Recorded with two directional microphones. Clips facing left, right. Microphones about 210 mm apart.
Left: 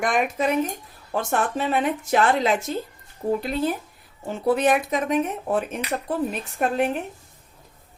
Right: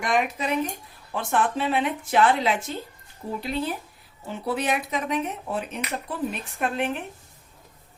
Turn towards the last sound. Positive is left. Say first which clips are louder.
# left 4 dB
turn(degrees=40)  # may be behind; listen again after turning